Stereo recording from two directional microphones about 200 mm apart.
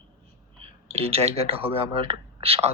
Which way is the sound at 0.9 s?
30° right (ahead or behind).